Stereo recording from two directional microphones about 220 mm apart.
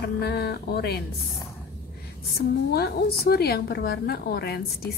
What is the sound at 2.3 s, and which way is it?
A woman's voice, 45° left (ahead or behind).